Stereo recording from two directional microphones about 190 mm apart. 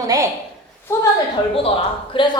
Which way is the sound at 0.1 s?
20° right (ahead or behind).